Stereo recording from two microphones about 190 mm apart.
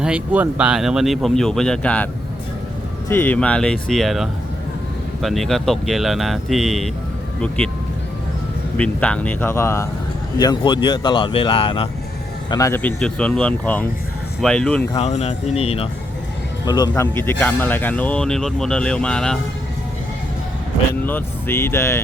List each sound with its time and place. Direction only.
0.0 s speech: 5° right (ahead or behind)
3.1 s speech: 10° left (ahead or behind)
8.8 s speech: 5° left (ahead or behind); by 11.9 s 30° left (ahead or behind)
12.5 s speech: 15° left (ahead or behind)
14.9 s speech: 35° left (ahead or behind)
16.6 s speech: 20° left (ahead or behind); by 19.4 s 5° left (ahead or behind)
21.0 s speech: 10° left (ahead or behind)